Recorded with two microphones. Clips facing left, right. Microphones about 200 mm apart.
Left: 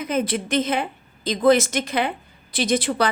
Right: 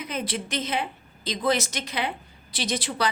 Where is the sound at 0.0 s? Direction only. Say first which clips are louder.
Left 7 dB; 50° left (ahead or behind).